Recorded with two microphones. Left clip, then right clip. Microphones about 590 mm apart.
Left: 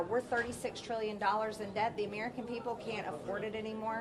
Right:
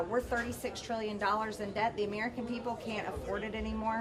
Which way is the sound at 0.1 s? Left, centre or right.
Right.